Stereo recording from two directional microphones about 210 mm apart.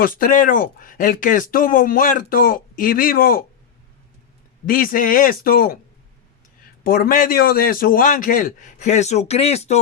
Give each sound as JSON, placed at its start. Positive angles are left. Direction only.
{"t": 0.0, "sound": "speech", "side_deg": 40}
{"t": 4.6, "sound": "speech", "side_deg": 40}
{"t": 6.8, "sound": "speech", "side_deg": 45}